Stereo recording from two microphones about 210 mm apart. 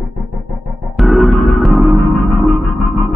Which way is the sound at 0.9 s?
Centre (ahead or behind).